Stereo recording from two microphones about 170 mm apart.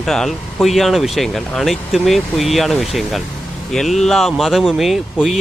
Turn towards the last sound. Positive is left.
turn(degrees=0)  # may be behind; listen again after turning